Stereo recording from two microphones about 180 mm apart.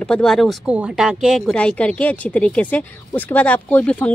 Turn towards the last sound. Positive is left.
turn(degrees=10)  # may be behind; listen again after turning